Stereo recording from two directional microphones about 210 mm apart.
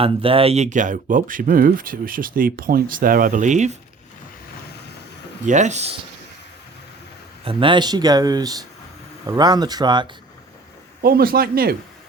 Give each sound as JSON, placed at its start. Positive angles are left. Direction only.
{"t": 0.0, "sound": "speech", "side_deg": -25}
{"t": 5.5, "sound": "speech", "side_deg": -35}
{"t": 7.4, "sound": "speech", "side_deg": -25}
{"t": 11.0, "sound": "speech", "side_deg": -45}